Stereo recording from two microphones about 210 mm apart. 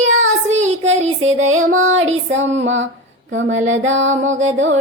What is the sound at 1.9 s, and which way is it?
Music, 30° right (ahead or behind).